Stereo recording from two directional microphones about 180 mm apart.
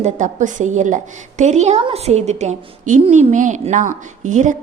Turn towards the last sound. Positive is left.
turn(degrees=-45)  # may be behind; listen again after turning